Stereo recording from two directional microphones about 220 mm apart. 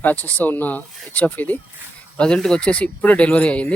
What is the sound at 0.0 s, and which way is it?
Speech, 10° left (ahead or behind).